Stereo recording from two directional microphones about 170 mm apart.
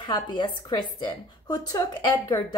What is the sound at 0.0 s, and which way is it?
A woman's voice, 25° left (ahead or behind).